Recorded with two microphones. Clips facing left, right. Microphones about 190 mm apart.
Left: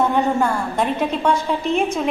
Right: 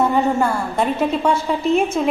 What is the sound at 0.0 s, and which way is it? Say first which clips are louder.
A woman's voice: right 1 dB; 5° right (ahead or behind).